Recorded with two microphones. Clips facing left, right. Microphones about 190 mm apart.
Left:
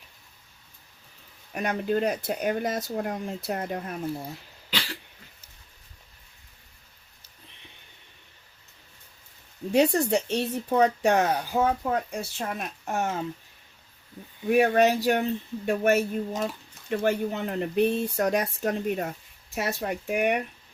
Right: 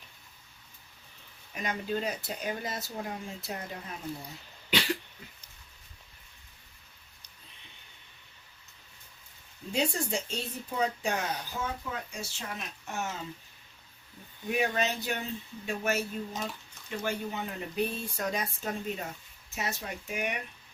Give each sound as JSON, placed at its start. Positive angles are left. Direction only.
{"t": 1.5, "sound": "speech", "side_deg": 60}
{"t": 9.6, "sound": "a sound", "side_deg": 40}
{"t": 10.1, "sound": "speech", "side_deg": 65}
{"t": 11.2, "sound": "speech", "side_deg": 55}
{"t": 14.4, "sound": "speech", "side_deg": 55}